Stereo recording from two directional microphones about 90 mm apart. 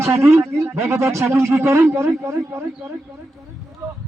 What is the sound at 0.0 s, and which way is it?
A man's voice, 30° right (ahead or behind).